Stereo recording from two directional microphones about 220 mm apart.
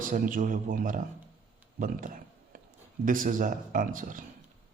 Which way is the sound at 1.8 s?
40° right (ahead or behind).